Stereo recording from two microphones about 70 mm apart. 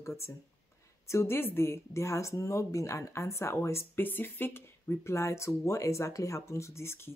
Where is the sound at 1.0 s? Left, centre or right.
Left.